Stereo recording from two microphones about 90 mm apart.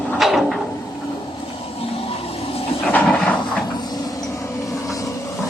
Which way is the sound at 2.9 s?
15° left (ahead or behind).